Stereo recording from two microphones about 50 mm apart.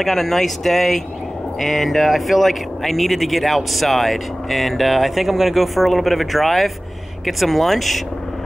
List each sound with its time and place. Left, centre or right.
0.0 s speech: centre